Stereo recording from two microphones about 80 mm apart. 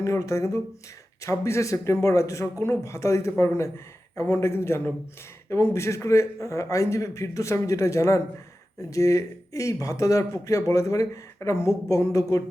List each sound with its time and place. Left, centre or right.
0.0 s a man's voice: left